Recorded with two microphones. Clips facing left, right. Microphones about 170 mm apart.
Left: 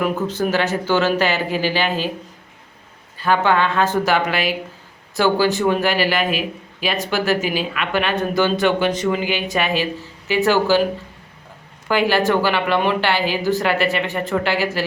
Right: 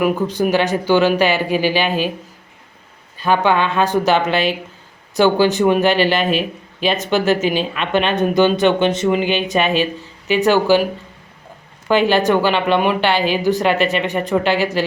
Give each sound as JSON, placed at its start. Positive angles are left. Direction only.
{"t": 0.0, "sound": "speech", "side_deg": -15}
{"t": 3.2, "sound": "speech", "side_deg": -15}
{"t": 11.9, "sound": "speech", "side_deg": -20}